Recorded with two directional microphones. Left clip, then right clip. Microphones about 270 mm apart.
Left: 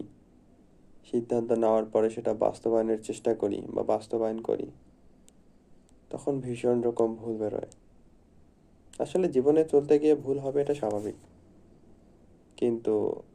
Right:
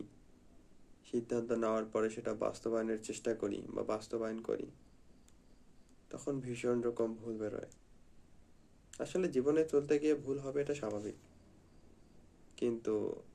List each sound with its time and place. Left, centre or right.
1.0 s speech: centre
6.1 s speech: centre
8.9 s speech: centre
12.5 s speech: centre